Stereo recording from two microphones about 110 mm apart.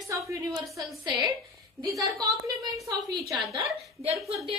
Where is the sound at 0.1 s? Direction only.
30° right (ahead or behind).